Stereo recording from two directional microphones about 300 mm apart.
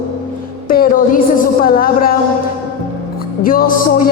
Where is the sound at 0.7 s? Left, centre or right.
Left.